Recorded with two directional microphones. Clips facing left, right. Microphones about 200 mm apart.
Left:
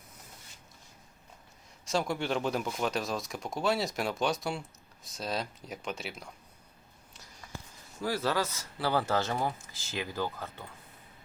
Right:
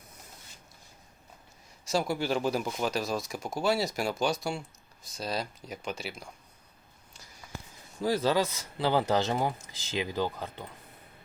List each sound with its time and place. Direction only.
1.8 s speech: 5° right (ahead or behind)
7.4 s a sound: 5° right (ahead or behind)
8.0 s speech: 20° right (ahead or behind)